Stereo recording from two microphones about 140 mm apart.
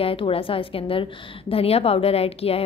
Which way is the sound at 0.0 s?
40° left (ahead or behind).